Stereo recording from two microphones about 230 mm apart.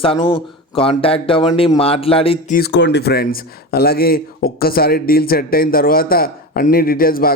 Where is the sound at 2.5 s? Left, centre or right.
Left.